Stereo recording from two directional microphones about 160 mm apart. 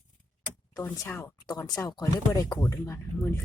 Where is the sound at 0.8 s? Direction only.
15° left (ahead or behind).